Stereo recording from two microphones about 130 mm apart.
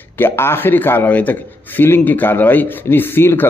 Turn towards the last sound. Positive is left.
turn(degrees=15)  # may be behind; listen again after turning